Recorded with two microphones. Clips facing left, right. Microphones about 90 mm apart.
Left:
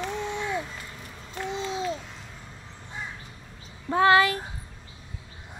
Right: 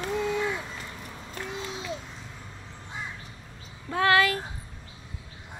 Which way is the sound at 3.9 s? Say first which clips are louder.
Left 3 dB; 25° left (ahead or behind).